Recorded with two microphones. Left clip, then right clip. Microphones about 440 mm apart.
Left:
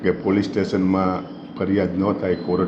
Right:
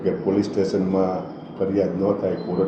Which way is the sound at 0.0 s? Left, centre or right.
Left.